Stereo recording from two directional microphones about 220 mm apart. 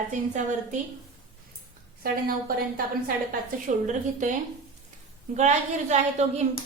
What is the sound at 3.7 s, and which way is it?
Speech, 35° right (ahead or behind).